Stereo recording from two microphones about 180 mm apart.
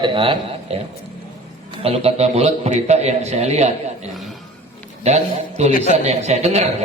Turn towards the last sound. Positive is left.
turn(degrees=-35)  # may be behind; listen again after turning